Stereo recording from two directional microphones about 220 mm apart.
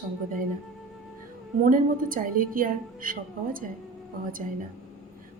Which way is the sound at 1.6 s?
40° right (ahead or behind).